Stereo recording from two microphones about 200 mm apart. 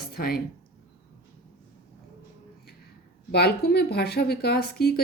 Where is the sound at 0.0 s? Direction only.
50° left (ahead or behind).